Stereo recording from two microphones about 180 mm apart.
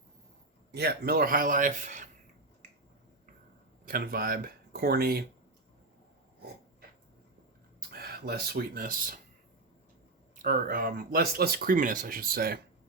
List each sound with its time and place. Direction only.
0.7 s speech: 60° right (ahead or behind); by 2.0 s 45° right (ahead or behind)
3.8 s speech: 55° right (ahead or behind)
7.8 s speech: 60° right (ahead or behind)
10.3 s speech: 50° right (ahead or behind)